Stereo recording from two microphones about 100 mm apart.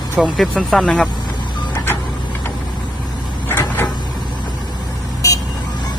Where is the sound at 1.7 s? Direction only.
25° left (ahead or behind).